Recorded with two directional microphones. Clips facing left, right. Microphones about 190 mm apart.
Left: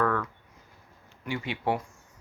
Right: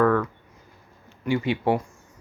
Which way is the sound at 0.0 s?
30° right (ahead or behind).